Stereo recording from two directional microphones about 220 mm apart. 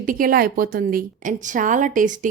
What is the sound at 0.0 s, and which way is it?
A woman's voice, 40° right (ahead or behind).